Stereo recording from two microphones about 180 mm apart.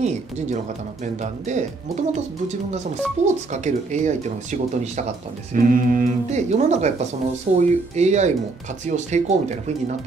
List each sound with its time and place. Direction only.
0.0 s speech: 40° right (ahead or behind)